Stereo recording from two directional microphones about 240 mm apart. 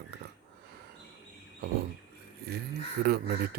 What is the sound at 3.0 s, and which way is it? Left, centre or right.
Speech, right.